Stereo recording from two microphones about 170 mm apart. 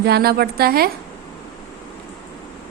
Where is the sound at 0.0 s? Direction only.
70° right (ahead or behind).